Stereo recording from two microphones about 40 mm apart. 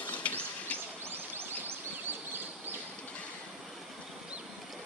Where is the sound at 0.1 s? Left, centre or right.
Left.